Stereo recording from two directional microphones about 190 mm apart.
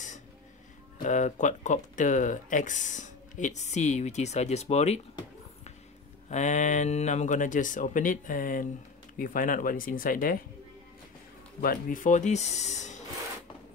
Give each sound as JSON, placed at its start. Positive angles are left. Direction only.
{"t": 1.0, "sound": "speech", "side_deg": 40}
{"t": 6.2, "sound": "speech", "side_deg": 40}
{"t": 11.6, "sound": "speech", "side_deg": 45}